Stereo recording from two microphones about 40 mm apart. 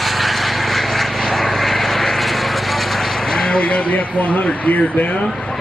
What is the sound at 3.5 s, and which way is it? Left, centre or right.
Speech, left.